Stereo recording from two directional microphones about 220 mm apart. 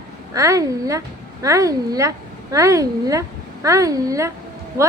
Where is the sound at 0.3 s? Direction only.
15° right (ahead or behind).